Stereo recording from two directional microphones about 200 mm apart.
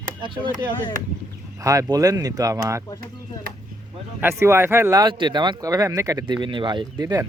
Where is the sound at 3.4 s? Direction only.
20° left (ahead or behind).